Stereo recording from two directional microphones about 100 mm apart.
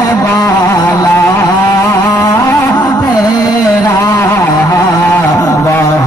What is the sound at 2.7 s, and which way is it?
Carnatic music, 45° left (ahead or behind).